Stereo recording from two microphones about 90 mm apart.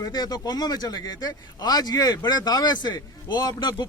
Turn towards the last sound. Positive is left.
turn(degrees=50)  # may be behind; listen again after turning